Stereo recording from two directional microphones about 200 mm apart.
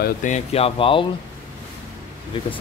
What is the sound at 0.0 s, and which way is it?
Speech, 40° left (ahead or behind).